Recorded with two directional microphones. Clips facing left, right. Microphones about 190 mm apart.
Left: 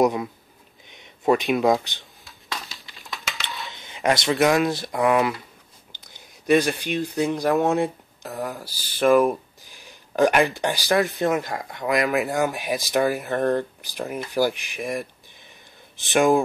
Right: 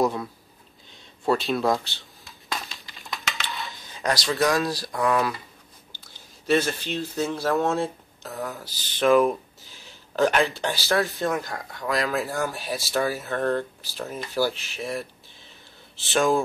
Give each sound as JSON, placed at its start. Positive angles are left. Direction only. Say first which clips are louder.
{"t": 0.0, "sound": "speech", "louder": "left 4 dB", "side_deg": 15}
{"t": 2.2, "sound": "a sound", "louder": "right 1 dB", "side_deg": 0}
{"t": 3.7, "sound": "speech", "louder": "left 5 dB", "side_deg": 25}
{"t": 9.6, "sound": "speech", "louder": "left 1 dB", "side_deg": 15}